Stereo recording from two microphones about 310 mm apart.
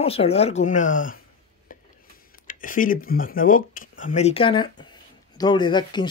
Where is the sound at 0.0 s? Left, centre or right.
Centre.